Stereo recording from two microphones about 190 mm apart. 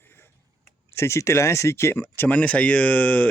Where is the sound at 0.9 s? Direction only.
15° left (ahead or behind).